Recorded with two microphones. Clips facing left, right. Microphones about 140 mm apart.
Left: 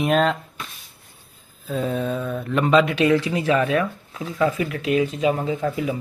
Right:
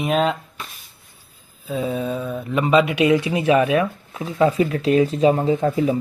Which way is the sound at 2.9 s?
20° right (ahead or behind).